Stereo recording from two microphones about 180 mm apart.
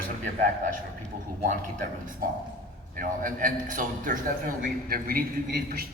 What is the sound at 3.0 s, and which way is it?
A man's voice, 50° right (ahead or behind).